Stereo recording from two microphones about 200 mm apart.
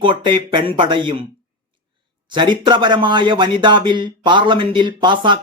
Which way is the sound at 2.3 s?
25° right (ahead or behind).